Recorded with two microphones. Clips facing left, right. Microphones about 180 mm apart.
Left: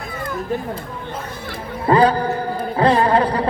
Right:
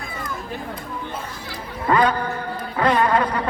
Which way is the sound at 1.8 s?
30° left (ahead or behind).